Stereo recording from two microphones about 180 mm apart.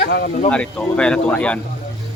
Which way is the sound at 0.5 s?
5° left (ahead or behind).